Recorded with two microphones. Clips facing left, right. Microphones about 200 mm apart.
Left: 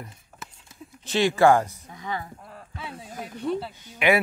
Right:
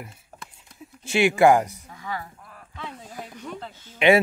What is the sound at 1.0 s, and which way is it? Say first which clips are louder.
Speech: right 1 dB; 10° right (ahead or behind).